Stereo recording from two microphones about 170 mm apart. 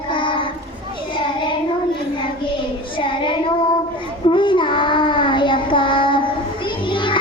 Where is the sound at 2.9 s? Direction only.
30° left (ahead or behind).